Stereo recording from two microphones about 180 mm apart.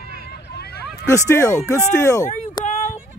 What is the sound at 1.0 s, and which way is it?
Speech, 15° left (ahead or behind).